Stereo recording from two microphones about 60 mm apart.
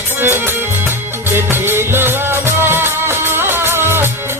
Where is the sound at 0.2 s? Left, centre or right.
Right.